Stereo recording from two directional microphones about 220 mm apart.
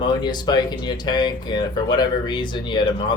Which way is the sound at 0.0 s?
20° left (ahead or behind).